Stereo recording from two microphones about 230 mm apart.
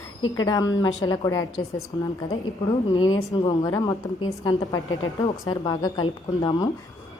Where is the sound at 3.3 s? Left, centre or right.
Centre.